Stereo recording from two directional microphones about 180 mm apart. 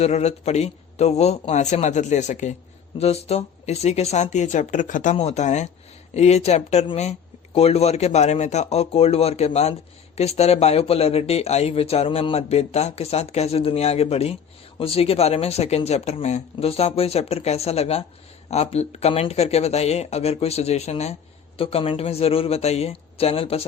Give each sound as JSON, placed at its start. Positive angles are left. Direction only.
{"t": 0.0, "sound": "speech", "side_deg": 40}